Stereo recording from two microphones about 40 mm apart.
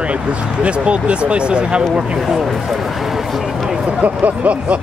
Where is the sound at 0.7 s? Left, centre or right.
Right.